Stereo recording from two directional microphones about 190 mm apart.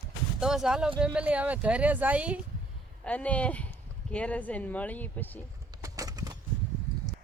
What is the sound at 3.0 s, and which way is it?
Speech, 5° left (ahead or behind).